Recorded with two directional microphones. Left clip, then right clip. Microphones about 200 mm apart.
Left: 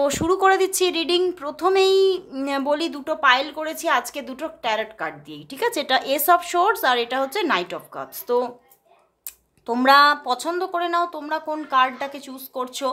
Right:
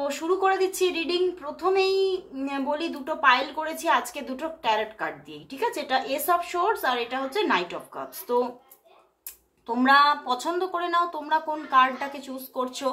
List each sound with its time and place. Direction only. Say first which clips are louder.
0.0 s speech: left 6 dB; 50° left (ahead or behind)
9.7 s speech: left 4 dB; 40° left (ahead or behind)